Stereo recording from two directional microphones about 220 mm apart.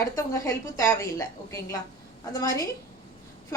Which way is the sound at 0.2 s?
15° left (ahead or behind).